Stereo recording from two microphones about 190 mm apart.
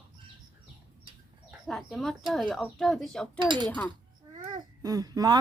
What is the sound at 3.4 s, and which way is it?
Speech, 25° right (ahead or behind).